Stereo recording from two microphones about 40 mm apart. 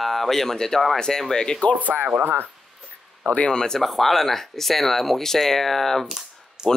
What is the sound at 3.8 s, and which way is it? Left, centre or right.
Speech, centre.